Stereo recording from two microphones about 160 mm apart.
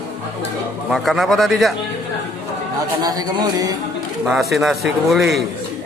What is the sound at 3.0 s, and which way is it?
Speech, 25° right (ahead or behind).